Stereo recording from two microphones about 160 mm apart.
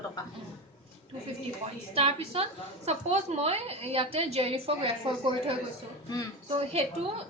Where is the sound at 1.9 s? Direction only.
35° right (ahead or behind).